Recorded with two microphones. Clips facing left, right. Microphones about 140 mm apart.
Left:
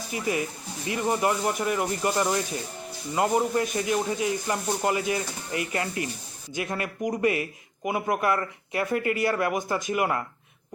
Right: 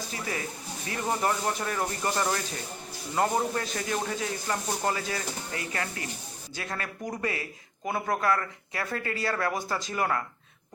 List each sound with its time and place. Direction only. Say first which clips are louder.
0.1 s speech: left 9 dB; 15° left (ahead or behind)